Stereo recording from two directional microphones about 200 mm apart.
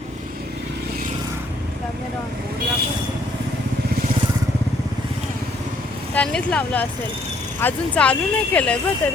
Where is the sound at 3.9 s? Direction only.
50° right (ahead or behind).